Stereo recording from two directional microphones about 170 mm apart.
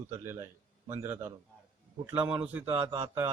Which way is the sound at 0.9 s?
15° right (ahead or behind).